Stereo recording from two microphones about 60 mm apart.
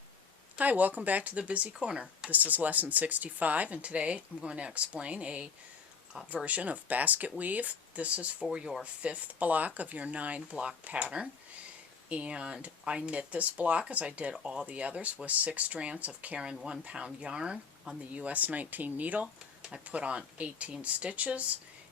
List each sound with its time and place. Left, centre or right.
0.6 s speech: right
2.3 s speech: right